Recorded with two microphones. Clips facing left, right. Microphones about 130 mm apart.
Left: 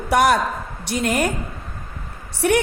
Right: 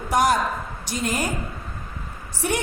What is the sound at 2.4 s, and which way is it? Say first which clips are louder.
Speech: left 7 dB; 65° left (ahead or behind).